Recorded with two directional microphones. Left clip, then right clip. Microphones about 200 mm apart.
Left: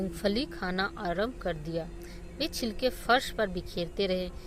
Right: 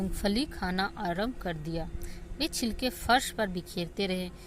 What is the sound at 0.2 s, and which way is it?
Speech, 30° right (ahead or behind).